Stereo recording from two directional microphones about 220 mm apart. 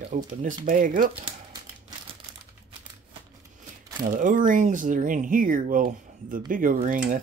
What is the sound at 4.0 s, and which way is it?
Speech, 35° right (ahead or behind).